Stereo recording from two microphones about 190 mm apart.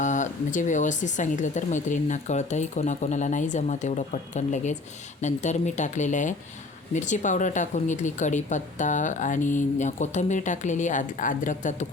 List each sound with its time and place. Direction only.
0.0 s speech: 40° left (ahead or behind)